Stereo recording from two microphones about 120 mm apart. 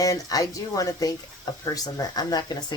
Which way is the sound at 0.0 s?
30° left (ahead or behind).